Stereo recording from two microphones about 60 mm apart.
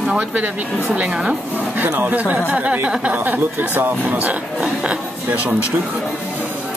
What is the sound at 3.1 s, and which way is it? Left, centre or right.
Speech, right.